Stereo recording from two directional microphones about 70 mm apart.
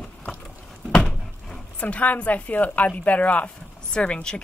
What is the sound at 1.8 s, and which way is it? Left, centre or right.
A woman's voice, centre.